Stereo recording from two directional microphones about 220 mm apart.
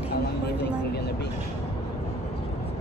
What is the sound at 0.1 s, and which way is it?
Vehicle, 45° left (ahead or behind).